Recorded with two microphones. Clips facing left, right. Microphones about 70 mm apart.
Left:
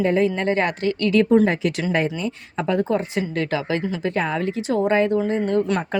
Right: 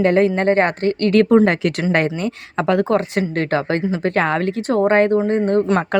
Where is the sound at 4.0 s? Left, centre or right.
Right.